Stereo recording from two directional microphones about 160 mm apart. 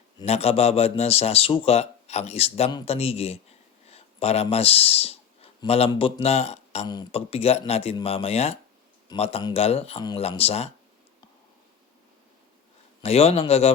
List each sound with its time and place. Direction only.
0.3 s a man's voice: 40° left (ahead or behind)
3.8 s a sound: 40° left (ahead or behind)
5.9 s a man's voice: 35° left (ahead or behind)
6.8 s speech: 25° left (ahead or behind)
7.1 s a man's voice: 35° left (ahead or behind)
13.0 s a man's voice: 40° left (ahead or behind)